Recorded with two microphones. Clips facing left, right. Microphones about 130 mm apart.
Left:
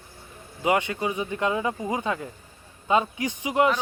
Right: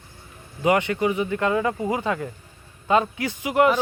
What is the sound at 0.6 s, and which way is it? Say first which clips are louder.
Speech: right 4 dB; 15° left (ahead or behind).